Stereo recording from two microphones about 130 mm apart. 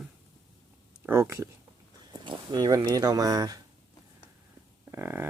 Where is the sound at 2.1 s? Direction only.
35° right (ahead or behind).